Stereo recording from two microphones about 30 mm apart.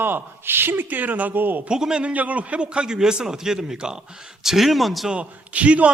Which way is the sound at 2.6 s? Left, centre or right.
Right.